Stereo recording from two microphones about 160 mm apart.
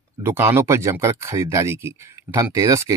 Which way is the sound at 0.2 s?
15° right (ahead or behind).